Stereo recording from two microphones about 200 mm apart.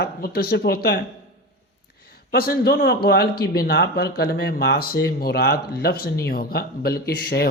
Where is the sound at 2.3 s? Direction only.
50° left (ahead or behind).